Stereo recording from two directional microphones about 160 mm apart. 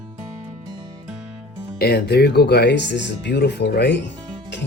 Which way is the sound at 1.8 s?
90° left.